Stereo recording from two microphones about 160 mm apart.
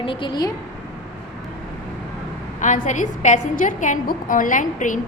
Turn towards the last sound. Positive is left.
turn(degrees=55)  # may be behind; listen again after turning